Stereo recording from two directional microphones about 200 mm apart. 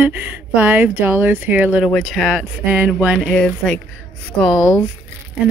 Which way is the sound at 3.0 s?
Centre (ahead or behind).